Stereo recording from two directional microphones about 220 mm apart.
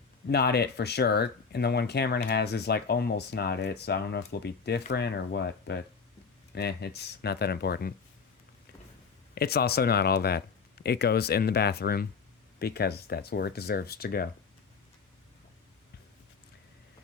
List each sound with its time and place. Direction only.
0.3 s speech: 45° left (ahead or behind)
9.3 s speech: 45° left (ahead or behind)